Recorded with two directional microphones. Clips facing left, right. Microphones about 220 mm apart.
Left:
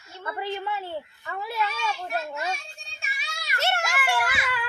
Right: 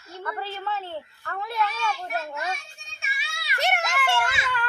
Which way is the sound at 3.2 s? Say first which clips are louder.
Left 1 dB; 45° left (ahead or behind).